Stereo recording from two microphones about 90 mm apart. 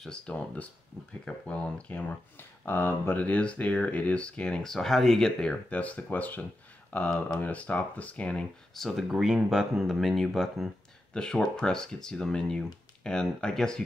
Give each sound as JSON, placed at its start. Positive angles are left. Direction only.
{"t": 0.0, "sound": "speech", "side_deg": 10}